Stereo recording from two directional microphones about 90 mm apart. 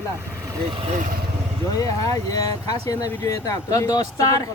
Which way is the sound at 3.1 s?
30° left (ahead or behind).